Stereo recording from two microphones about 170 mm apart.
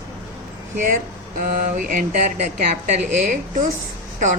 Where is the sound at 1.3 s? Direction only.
50° right (ahead or behind).